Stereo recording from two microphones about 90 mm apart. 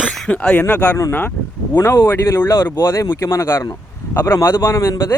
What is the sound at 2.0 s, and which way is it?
Speech, 25° left (ahead or behind).